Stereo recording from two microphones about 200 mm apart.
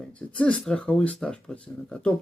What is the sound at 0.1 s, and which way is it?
Speech, 5° left (ahead or behind).